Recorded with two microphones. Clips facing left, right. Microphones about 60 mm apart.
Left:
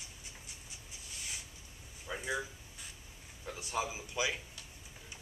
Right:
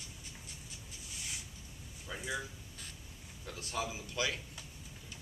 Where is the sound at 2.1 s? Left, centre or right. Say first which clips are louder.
Left 2 dB; centre.